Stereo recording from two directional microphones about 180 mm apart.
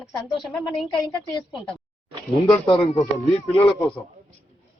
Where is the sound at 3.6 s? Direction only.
Centre (ahead or behind).